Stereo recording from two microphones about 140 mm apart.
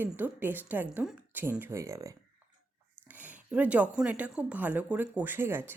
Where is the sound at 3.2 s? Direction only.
10° right (ahead or behind).